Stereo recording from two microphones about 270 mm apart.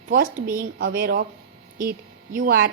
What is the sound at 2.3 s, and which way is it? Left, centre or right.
Speech, right.